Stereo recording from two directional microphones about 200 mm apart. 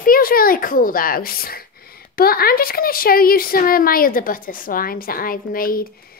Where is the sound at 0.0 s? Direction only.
45° left (ahead or behind).